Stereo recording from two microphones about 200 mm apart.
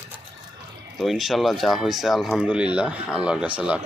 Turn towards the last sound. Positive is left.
turn(degrees=-5)  # may be behind; listen again after turning